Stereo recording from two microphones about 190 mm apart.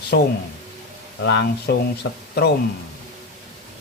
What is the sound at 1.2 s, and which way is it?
Speech, 65° left (ahead or behind).